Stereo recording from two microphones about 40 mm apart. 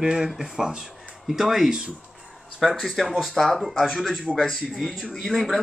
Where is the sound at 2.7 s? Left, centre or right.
Centre.